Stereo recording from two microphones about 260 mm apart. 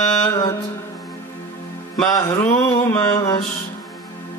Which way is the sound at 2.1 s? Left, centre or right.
Centre.